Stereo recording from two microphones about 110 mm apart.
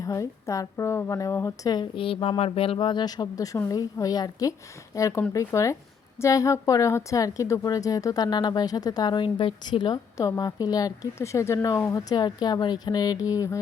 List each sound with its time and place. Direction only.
0.0 s a woman's voice: 30° left (ahead or behind)
2.0 s a woman's voice: 55° left (ahead or behind)
10.2 s a woman's voice: 30° left (ahead or behind)